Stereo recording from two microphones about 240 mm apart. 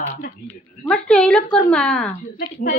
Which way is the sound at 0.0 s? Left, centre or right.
Left.